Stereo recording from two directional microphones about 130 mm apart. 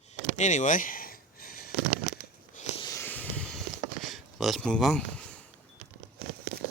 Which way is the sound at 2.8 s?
25° left (ahead or behind).